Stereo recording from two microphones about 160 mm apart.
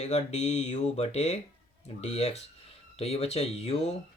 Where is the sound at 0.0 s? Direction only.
45° left (ahead or behind).